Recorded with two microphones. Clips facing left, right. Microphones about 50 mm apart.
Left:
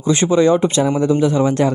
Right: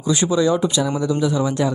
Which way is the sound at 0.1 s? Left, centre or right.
Left.